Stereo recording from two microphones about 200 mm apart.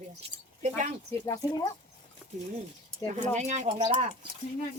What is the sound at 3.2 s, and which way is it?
Speech, 35° right (ahead or behind).